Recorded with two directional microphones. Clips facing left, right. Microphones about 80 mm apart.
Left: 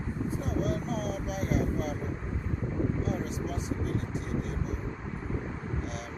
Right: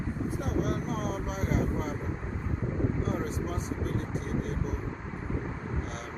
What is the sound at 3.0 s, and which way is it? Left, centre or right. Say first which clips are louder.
Speech: right 1 dB; right.